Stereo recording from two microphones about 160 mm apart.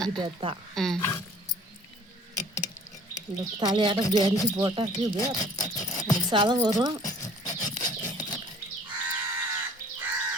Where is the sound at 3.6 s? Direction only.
30° right (ahead or behind).